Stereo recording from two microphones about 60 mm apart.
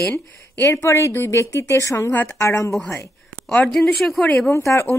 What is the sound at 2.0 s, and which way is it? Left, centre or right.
Speech, left.